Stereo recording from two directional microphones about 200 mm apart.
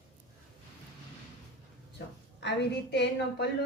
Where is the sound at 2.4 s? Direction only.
60° left (ahead or behind).